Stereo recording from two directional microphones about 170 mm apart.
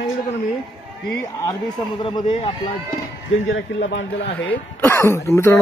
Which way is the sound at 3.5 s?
90° left.